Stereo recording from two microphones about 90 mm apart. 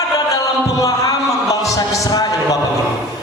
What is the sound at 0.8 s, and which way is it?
Speech, 45° left (ahead or behind).